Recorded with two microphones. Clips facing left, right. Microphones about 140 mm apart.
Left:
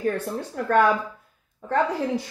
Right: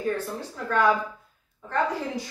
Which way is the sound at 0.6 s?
60° left (ahead or behind).